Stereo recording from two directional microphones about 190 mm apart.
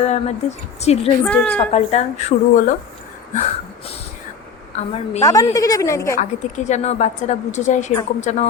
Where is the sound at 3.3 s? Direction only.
30° left (ahead or behind).